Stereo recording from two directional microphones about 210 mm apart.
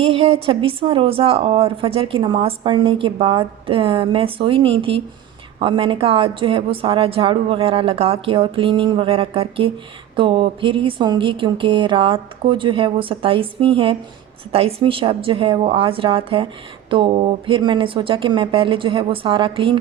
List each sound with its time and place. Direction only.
0.0 s a woman's voice: 25° right (ahead or behind)